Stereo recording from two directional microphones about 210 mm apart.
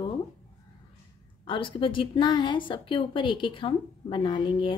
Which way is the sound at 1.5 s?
25° left (ahead or behind).